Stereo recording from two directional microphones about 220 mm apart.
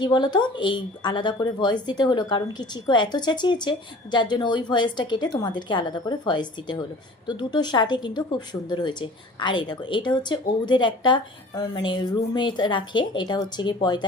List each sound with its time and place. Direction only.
0.0 s a woman's voice: 20° left (ahead or behind)